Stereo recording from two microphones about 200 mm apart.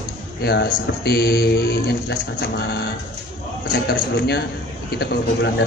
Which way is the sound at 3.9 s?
55° left (ahead or behind).